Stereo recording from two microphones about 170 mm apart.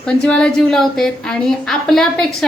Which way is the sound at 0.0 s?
5° left (ahead or behind).